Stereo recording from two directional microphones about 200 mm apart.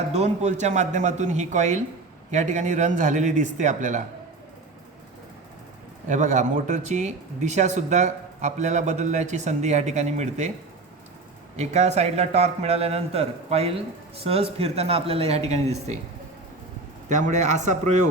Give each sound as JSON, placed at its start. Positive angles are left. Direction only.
{"t": 0.1, "sound": "speech", "side_deg": -35}
{"t": 6.1, "sound": "speech", "side_deg": -35}
{"t": 11.5, "sound": "speech", "side_deg": -35}
{"t": 17.1, "sound": "speech", "side_deg": -40}